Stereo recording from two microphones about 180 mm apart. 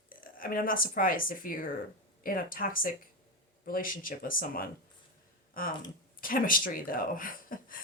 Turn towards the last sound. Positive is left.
turn(degrees=50)  # may be behind; listen again after turning